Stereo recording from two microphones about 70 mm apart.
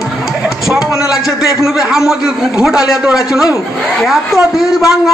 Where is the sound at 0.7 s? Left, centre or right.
Centre.